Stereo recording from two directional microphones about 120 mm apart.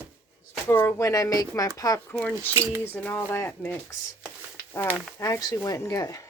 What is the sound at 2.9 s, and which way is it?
Speech, 15° left (ahead or behind).